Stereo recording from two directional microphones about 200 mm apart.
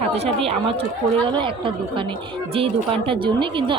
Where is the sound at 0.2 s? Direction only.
30° right (ahead or behind).